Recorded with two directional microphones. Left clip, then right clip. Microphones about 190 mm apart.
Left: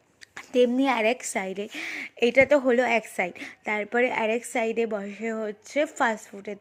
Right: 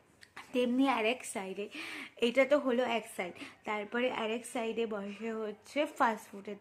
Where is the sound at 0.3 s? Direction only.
30° left (ahead or behind).